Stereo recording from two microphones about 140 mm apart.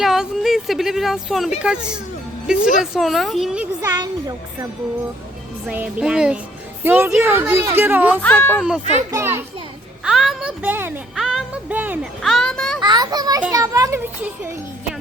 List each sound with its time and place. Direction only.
0.0 s a woman's voice: 5° right (ahead or behind)
3.8 s a child's voice: 25° right (ahead or behind)
5.6 s speech: 10° right (ahead or behind)
6.8 s speech: 15° right (ahead or behind)
8.2 s speech: 10° left (ahead or behind)
8.8 s a child's voice: 55° right (ahead or behind)
9.0 s a child's voice: 20° right (ahead or behind)
10.0 s a sound: 5° right (ahead or behind)
10.6 s speech: 15° right (ahead or behind)
11.1 s music: centre (ahead or behind)
11.7 s speech: 10° right (ahead or behind)
12.2 s music: 5° left (ahead or behind)
12.8 s a child's voice: 30° right (ahead or behind)